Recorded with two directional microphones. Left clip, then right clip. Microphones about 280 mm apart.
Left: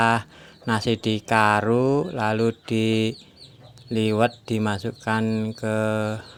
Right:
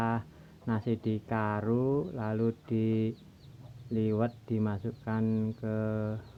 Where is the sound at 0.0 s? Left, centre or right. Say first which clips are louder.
Left 13 dB; left.